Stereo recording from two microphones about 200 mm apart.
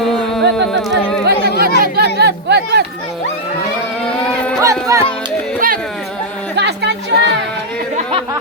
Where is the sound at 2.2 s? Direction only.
55° right (ahead or behind).